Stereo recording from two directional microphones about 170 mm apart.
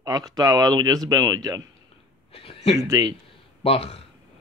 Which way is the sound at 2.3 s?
35° left (ahead or behind).